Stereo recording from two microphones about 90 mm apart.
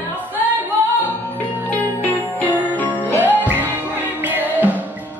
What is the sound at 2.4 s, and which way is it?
Jingle bell, 20° left (ahead or behind).